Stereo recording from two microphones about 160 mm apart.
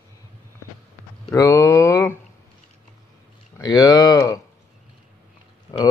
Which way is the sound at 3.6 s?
25° left (ahead or behind).